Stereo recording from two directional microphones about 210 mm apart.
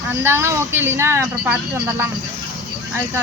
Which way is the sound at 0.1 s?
10° right (ahead or behind).